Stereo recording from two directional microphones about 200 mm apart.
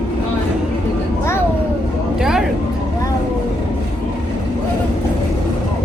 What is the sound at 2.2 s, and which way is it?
Speech, centre (ahead or behind).